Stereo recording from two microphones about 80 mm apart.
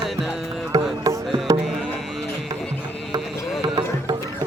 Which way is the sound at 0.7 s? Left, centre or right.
Right.